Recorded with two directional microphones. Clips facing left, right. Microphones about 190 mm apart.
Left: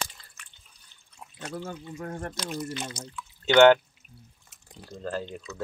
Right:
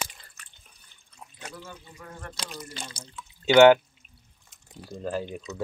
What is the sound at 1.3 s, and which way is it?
Speech, 45° left (ahead or behind).